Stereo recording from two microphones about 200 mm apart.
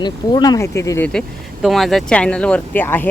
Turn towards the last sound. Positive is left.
turn(degrees=10)  # may be behind; listen again after turning